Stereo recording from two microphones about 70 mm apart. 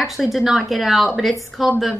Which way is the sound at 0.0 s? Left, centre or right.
Centre.